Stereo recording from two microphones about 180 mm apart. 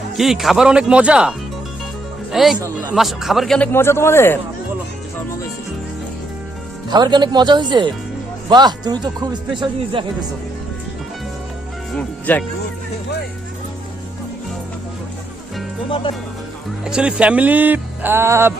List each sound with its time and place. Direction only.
0.2 s speech: centre (ahead or behind)
2.6 s speech: 20° right (ahead or behind)
2.9 s speech: centre (ahead or behind)
6.9 s speech: 25° right (ahead or behind)
11.9 s speech: 5° left (ahead or behind)
16.8 s speech: 5° right (ahead or behind)